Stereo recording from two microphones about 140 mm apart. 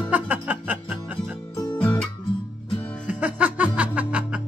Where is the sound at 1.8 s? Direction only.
10° left (ahead or behind).